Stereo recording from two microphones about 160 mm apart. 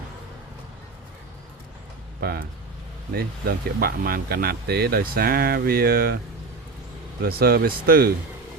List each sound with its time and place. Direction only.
3.1 s speech: 70° right (ahead or behind)
7.3 s speech: 70° right (ahead or behind)